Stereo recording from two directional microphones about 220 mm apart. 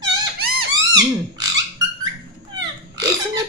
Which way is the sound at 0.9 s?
20° right (ahead or behind).